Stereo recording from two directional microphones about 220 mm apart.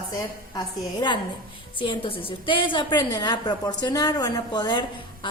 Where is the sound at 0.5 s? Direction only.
20° left (ahead or behind).